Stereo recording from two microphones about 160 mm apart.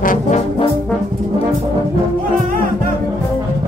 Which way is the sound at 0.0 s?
55° left (ahead or behind).